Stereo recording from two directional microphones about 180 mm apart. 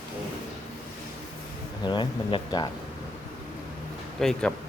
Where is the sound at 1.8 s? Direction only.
25° left (ahead or behind).